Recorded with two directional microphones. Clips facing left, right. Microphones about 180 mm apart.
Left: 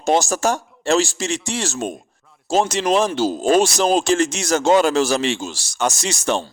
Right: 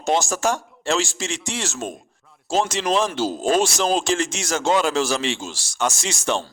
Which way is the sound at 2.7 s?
45° left (ahead or behind).